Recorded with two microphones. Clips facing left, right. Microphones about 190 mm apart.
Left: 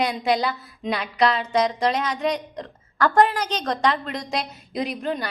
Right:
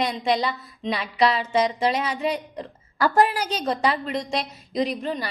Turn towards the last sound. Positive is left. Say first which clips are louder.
# right 1 dB
turn(degrees=0)  # may be behind; listen again after turning